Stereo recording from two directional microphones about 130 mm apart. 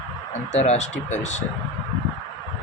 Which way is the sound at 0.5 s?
55° left (ahead or behind).